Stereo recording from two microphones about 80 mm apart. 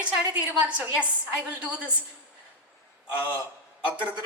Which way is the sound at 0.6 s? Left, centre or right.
Centre.